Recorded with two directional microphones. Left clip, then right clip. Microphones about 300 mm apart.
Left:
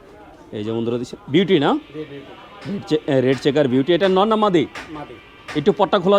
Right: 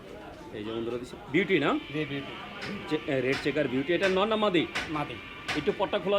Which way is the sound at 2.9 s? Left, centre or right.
Left.